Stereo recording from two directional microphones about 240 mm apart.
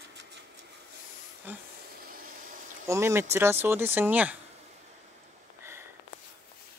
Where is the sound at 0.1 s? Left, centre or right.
Right.